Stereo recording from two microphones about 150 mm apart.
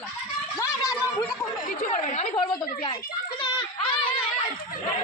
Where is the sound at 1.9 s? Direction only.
55° left (ahead or behind).